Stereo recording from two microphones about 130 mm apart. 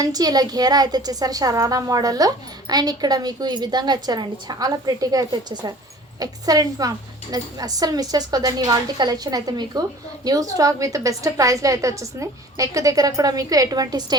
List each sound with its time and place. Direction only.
0.0 s a woman's voice: 30° right (ahead or behind)